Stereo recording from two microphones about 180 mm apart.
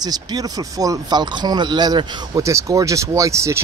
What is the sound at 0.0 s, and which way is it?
Speech, 20° right (ahead or behind).